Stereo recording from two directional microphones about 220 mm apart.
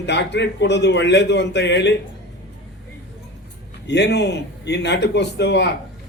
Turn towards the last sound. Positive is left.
turn(degrees=50)  # may be behind; listen again after turning